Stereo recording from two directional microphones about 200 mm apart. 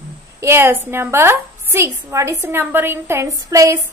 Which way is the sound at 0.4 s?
10° right (ahead or behind).